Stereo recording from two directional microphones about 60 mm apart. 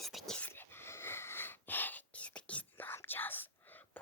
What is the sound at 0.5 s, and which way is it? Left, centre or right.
Whispering, left.